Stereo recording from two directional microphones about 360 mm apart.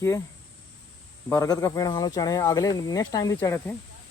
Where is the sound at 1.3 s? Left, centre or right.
Centre.